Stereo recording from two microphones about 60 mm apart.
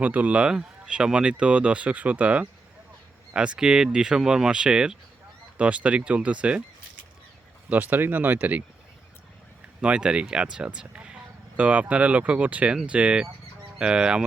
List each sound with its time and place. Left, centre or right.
0.0 s speech: right
7.7 s speech: right
9.8 s speech: centre